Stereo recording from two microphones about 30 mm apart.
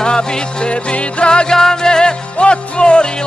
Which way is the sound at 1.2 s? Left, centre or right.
Left.